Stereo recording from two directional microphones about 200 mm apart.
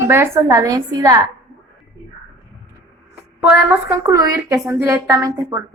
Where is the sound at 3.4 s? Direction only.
10° right (ahead or behind).